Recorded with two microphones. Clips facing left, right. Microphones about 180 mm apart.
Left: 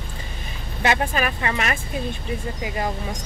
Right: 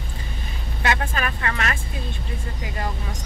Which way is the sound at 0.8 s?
20° left (ahead or behind).